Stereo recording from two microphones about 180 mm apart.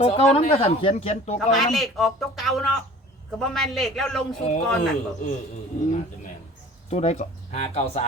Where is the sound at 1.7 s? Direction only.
Centre (ahead or behind).